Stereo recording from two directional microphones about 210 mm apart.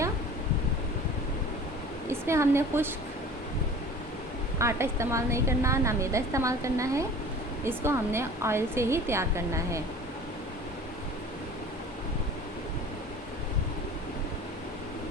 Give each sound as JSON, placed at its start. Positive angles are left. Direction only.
{"t": 2.0, "sound": "a woman's voice", "side_deg": -15}
{"t": 4.5, "sound": "a woman's voice", "side_deg": -15}